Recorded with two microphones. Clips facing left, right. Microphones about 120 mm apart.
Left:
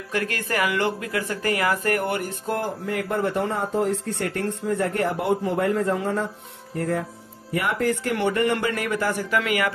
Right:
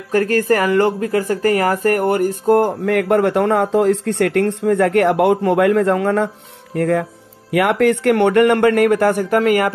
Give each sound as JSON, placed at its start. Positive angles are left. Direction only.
{"t": 0.1, "sound": "speech", "side_deg": -40}
{"t": 2.8, "sound": "speech", "side_deg": -75}